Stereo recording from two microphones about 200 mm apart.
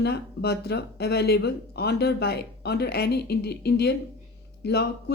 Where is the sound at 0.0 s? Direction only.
55° left (ahead or behind).